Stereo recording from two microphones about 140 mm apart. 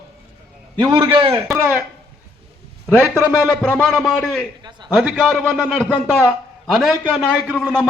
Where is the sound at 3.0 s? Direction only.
20° left (ahead or behind).